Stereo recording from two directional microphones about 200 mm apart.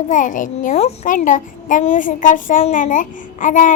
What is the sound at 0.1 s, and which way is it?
A child's voice, 40° left (ahead or behind).